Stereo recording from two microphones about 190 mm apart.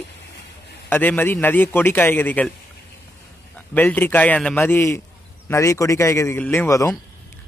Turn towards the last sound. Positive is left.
turn(degrees=15)  # may be behind; listen again after turning